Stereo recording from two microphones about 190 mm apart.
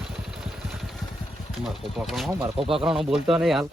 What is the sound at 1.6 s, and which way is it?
Speech, centre (ahead or behind).